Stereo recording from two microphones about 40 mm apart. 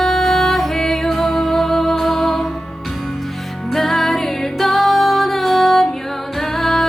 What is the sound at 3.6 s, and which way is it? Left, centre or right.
Music, centre.